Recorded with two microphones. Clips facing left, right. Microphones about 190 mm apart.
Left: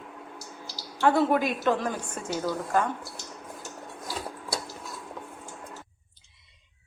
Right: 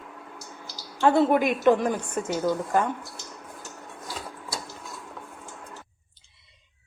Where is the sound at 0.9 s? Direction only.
20° right (ahead or behind).